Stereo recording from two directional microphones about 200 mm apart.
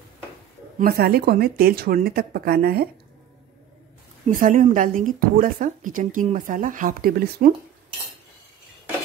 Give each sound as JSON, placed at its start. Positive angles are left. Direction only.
{"t": 0.7, "sound": "a woman's voice", "side_deg": -50}
{"t": 4.3, "sound": "speech", "side_deg": -40}